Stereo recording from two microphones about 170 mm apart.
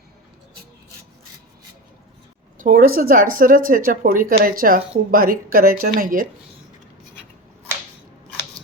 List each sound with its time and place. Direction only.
2.6 s speech: 55° right (ahead or behind)